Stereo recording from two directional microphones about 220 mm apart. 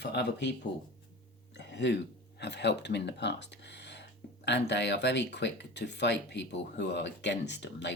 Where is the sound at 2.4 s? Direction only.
50° left (ahead or behind).